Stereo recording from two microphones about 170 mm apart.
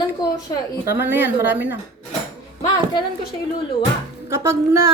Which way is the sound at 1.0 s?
10° right (ahead or behind).